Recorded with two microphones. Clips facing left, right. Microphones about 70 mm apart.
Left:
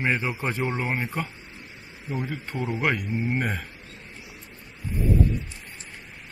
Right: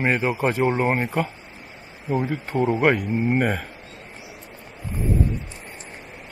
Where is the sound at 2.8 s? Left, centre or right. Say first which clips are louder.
Right 6 dB; right.